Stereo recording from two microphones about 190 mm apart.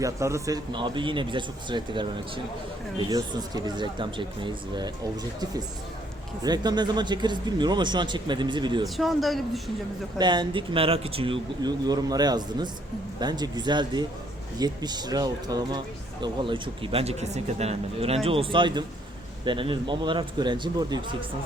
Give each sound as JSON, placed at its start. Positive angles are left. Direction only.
{"t": 0.0, "sound": "speech", "side_deg": -15}
{"t": 6.4, "sound": "speech", "side_deg": -20}
{"t": 9.0, "sound": "speech", "side_deg": 0}
{"t": 10.2, "sound": "speech", "side_deg": -25}